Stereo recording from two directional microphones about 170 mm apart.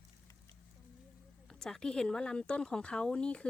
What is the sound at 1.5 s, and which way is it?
Speech, 5° left (ahead or behind).